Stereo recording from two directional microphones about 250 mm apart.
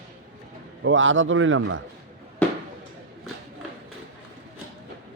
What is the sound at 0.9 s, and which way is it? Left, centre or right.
Speech, right.